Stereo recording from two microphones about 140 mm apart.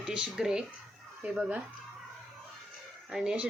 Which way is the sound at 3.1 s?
5° right (ahead or behind).